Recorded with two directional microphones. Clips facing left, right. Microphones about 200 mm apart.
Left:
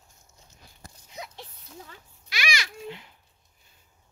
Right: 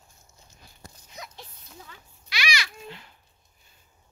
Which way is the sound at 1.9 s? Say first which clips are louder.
Right 1 dB; 45° left (ahead or behind).